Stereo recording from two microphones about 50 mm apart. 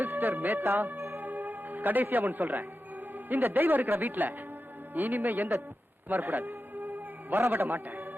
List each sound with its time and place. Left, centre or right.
0.0 s speech: right
1.2 s music: right
3.2 s speech: right
6.3 s music: right
7.5 s speech: right